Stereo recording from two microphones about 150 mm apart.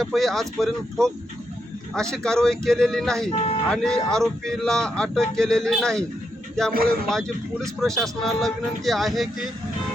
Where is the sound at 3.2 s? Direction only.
40° left (ahead or behind).